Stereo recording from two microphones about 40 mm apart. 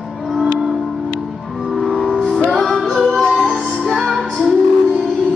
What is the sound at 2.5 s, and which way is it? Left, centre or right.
Music, centre.